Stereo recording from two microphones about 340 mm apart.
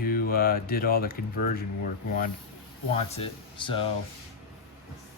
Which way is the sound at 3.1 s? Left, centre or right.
Centre.